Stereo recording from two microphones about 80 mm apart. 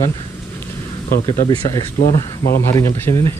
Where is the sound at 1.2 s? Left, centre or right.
Left.